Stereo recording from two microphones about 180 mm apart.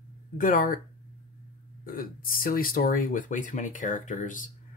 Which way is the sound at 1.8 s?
50° left (ahead or behind).